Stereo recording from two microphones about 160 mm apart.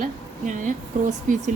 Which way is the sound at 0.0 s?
55° right (ahead or behind).